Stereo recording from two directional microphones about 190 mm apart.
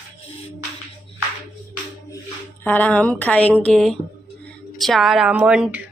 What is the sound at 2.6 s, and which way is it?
A woman's voice, 10° left (ahead or behind).